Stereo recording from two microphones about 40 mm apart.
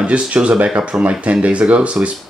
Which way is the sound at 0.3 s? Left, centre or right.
Right.